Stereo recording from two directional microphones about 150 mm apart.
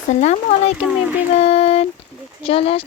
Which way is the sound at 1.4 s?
45° left (ahead or behind).